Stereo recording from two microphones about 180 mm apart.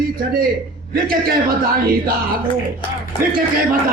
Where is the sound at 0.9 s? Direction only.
55° right (ahead or behind).